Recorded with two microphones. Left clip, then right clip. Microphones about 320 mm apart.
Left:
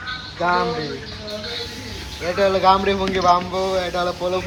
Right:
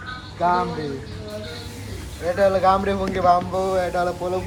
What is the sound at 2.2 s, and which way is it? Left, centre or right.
Speech, centre.